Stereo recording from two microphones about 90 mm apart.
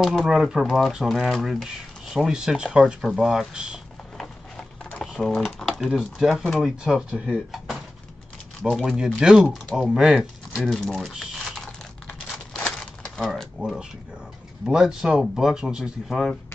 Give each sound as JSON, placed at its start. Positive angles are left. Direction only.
{"t": 0.1, "sound": "speech", "side_deg": -5}
{"t": 5.0, "sound": "typing", "side_deg": 0}
{"t": 5.4, "sound": "speech", "side_deg": 0}
{"t": 8.6, "sound": "speech", "side_deg": -5}
{"t": 13.0, "sound": "typewriter", "side_deg": 5}
{"t": 13.6, "sound": "speech", "side_deg": -10}